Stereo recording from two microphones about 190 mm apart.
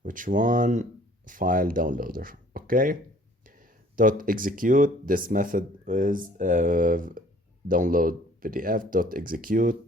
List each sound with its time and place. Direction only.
0.0 s speech: 45° right (ahead or behind)